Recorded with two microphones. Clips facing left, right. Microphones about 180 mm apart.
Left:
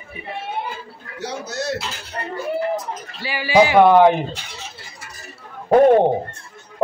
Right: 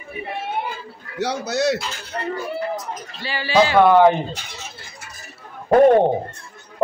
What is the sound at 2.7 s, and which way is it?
A man's voice, 10° left (ahead or behind).